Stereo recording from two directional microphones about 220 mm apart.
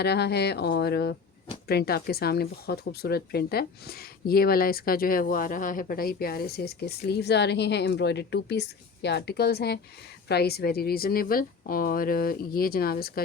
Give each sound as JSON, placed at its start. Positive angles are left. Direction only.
{"t": 0.0, "sound": "speech", "side_deg": 50}